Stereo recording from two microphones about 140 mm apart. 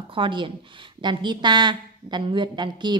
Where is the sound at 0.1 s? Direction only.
35° right (ahead or behind).